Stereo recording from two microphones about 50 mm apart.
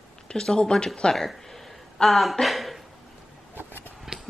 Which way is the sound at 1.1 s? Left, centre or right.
Centre.